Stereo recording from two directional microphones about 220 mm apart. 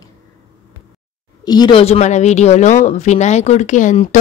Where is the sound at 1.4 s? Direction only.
20° left (ahead or behind).